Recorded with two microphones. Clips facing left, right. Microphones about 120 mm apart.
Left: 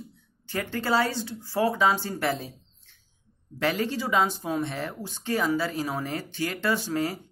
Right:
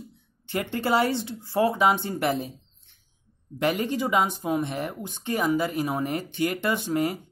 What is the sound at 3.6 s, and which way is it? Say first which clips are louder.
Speech: right 2 dB; 15° right (ahead or behind).